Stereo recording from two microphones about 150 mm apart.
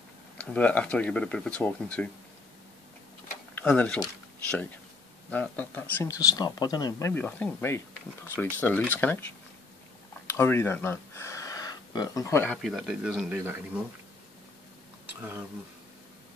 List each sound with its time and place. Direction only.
0.4 s speech: 10° left (ahead or behind)
3.5 s speech: 10° left (ahead or behind)
5.3 s speech: 10° left (ahead or behind)
6.2 s speech: 25° left (ahead or behind)
10.2 s a sound: 15° left (ahead or behind)
12.4 s a man's voice: centre (ahead or behind)